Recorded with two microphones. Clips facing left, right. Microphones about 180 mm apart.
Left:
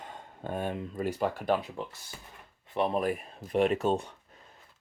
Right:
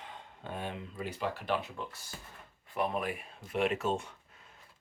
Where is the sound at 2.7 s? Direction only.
30° left (ahead or behind).